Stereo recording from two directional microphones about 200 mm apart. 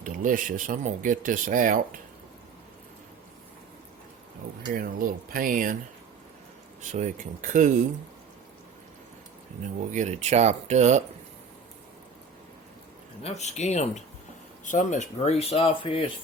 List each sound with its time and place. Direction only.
0.0 s speech: 40° right (ahead or behind)
4.7 s speech: 45° right (ahead or behind)
6.9 s speech: 40° right (ahead or behind)
9.9 s speech: 35° right (ahead or behind)
13.2 s speech: 35° left (ahead or behind)